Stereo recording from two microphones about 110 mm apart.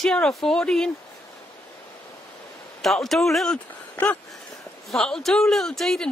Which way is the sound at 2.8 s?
Centre (ahead or behind).